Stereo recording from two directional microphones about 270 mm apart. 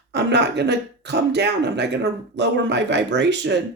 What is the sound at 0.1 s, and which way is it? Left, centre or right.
Speech, right.